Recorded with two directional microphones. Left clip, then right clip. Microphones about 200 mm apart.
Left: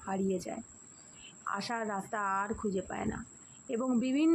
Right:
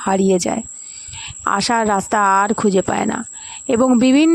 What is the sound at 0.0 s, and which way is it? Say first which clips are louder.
Speech: right 19 dB; 55° right (ahead or behind).